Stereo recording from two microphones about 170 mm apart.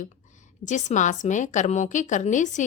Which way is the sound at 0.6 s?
45° left (ahead or behind).